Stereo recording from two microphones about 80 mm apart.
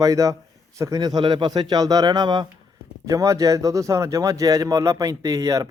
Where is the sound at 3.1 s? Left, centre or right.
Right.